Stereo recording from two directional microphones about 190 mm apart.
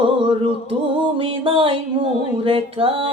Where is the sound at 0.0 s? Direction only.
25° right (ahead or behind).